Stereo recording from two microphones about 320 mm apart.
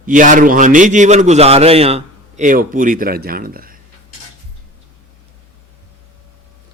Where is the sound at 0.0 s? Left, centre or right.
Right.